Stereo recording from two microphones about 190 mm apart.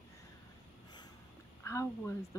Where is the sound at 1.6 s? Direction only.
15° left (ahead or behind).